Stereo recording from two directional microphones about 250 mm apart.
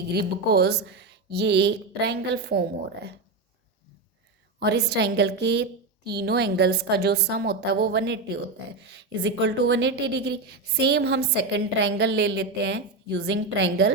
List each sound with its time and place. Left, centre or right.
0.1 s speech: right
4.6 s a woman's voice: right